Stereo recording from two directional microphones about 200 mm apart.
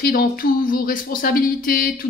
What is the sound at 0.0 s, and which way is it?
Speech, 50° left (ahead or behind).